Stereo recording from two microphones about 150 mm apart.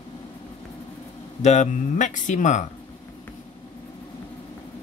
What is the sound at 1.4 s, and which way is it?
Speech, 50° left (ahead or behind).